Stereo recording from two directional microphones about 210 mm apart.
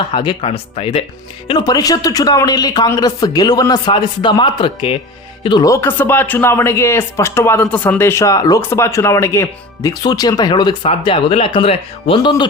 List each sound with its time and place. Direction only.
0.1 s speech: 25° left (ahead or behind)